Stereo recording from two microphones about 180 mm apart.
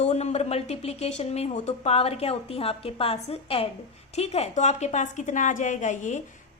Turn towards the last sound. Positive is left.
turn(degrees=45)  # may be behind; listen again after turning